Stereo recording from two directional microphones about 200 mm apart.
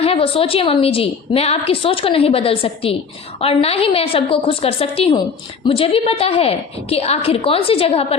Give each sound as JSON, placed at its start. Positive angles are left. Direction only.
{"t": 0.0, "sound": "a woman's voice", "side_deg": 30}